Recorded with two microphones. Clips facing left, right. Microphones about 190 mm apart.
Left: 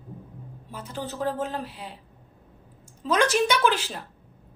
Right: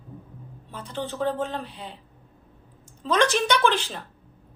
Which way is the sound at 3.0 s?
5° left (ahead or behind).